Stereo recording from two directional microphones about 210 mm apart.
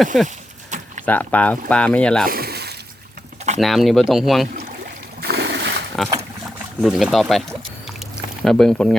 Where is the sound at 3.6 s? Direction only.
Centre (ahead or behind).